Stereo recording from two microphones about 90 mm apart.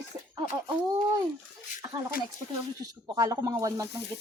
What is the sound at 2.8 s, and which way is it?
A woman's voice, 40° right (ahead or behind).